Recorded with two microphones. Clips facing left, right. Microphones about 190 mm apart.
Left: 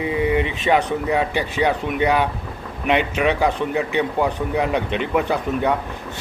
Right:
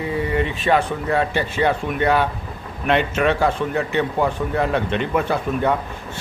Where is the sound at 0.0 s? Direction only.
15° left (ahead or behind).